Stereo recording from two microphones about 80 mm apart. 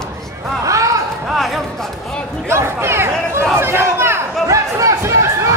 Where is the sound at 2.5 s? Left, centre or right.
Right.